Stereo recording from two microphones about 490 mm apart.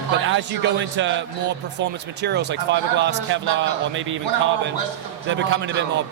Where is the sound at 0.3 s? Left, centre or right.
Right.